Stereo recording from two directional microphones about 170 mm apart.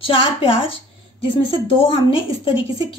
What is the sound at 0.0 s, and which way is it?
A woman's voice, 30° left (ahead or behind).